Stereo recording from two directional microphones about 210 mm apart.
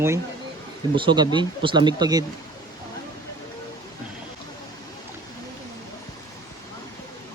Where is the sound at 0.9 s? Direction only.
25° right (ahead or behind).